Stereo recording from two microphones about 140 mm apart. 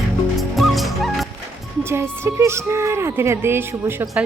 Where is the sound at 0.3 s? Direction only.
Centre (ahead or behind).